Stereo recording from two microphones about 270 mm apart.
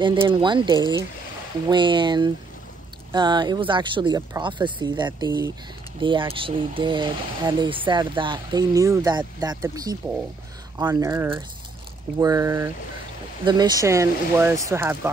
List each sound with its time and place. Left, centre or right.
0.0 s speech: centre